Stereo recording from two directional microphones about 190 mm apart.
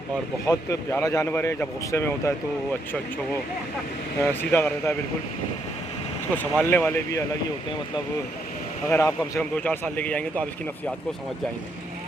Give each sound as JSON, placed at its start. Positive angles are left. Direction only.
{"t": 0.4, "sound": "speech", "side_deg": 20}
{"t": 4.3, "sound": "speech", "side_deg": 15}
{"t": 6.3, "sound": "speech", "side_deg": 10}
{"t": 8.9, "sound": "speech", "side_deg": 15}